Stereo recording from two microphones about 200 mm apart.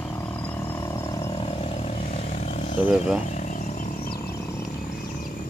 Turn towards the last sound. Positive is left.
turn(degrees=45)  # may be behind; listen again after turning